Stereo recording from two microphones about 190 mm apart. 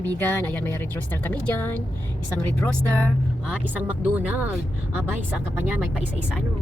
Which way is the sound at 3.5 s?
10° right (ahead or behind).